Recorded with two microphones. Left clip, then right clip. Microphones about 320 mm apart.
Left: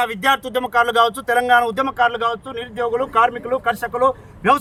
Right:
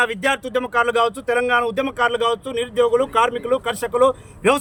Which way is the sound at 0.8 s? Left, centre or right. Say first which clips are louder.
Left 2 dB; centre.